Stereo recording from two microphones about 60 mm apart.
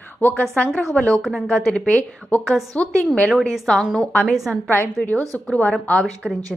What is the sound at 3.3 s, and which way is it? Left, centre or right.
Speech, centre.